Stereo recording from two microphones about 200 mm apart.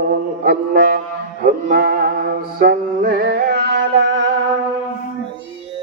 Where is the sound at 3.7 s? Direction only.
60° right (ahead or behind).